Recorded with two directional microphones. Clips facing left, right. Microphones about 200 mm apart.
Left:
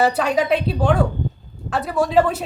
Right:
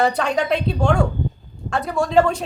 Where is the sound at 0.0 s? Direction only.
5° left (ahead or behind).